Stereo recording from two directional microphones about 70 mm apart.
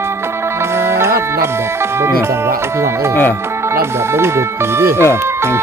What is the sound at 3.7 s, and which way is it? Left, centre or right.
Speech, right.